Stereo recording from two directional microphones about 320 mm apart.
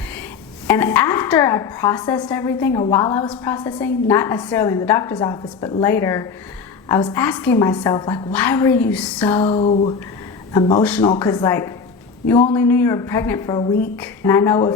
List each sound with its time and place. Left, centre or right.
0.7 s a woman's voice: centre
9.4 s a woman's voice: centre
12.5 s a woman's voice: centre